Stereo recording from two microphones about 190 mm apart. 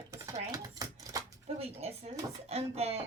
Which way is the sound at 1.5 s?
35° right (ahead or behind).